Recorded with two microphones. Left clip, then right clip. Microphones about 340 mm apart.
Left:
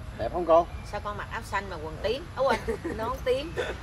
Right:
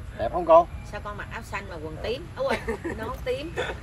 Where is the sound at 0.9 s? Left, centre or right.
Centre.